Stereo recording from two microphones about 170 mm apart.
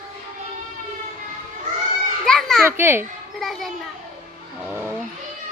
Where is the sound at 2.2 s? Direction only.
5° left (ahead or behind).